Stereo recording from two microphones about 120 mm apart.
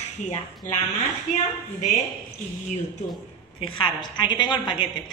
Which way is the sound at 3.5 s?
45° left (ahead or behind).